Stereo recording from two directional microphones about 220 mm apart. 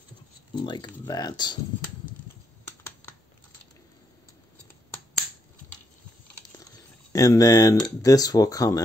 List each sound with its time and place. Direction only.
0.6 s speech: 20° left (ahead or behind)
7.1 s speech: 15° left (ahead or behind)